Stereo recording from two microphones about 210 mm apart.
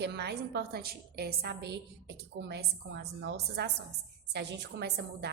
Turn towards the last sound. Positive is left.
turn(degrees=-55)  # may be behind; listen again after turning